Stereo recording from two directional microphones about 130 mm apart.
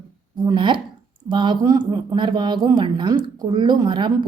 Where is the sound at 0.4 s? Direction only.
40° right (ahead or behind).